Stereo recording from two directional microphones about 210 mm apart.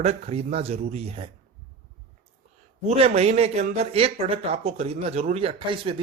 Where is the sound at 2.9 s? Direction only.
30° right (ahead or behind).